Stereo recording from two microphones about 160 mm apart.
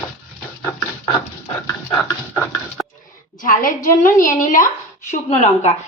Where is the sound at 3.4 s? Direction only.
60° left (ahead or behind).